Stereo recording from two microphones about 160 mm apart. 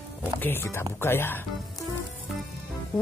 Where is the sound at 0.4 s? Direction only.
15° left (ahead or behind).